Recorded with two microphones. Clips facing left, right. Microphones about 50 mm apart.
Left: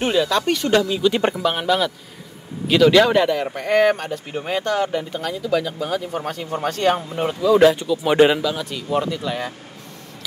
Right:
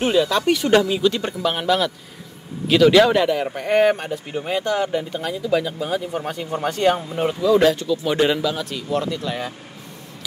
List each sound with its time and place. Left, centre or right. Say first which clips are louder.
0.0 s speech: right 1 dB; centre
1.4 s speech: even; centre
4.3 s speech: even; centre
4.6 s speech: even; centre; by 8.4 s left
8.4 s speech: even; centre